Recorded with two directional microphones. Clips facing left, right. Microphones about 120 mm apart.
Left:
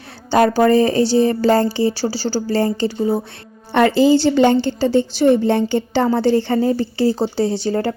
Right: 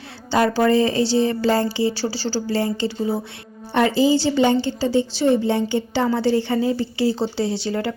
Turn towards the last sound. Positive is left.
turn(degrees=40)  # may be behind; listen again after turning